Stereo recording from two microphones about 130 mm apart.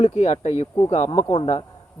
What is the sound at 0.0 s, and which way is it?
A man's voice, 65° left (ahead or behind).